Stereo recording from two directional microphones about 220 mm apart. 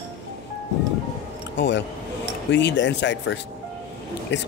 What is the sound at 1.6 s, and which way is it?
Speech, 55° left (ahead or behind).